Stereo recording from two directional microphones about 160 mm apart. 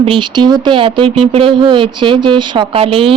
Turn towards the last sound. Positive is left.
turn(degrees=-35)  # may be behind; listen again after turning